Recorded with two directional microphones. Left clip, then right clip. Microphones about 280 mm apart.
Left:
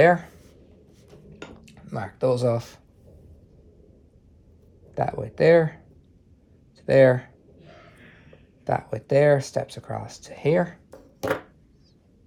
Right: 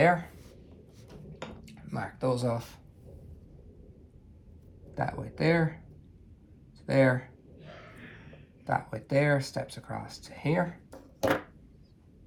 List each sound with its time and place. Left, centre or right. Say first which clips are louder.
0.0 s speech: left 7 dB; left
1.6 s speech: left 5 dB; left
4.9 s speech: left 9 dB; left
6.8 s speech: left 9 dB; left
8.6 s speech: left 5 dB; left